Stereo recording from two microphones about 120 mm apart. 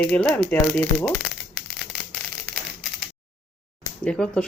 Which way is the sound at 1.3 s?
Centre (ahead or behind).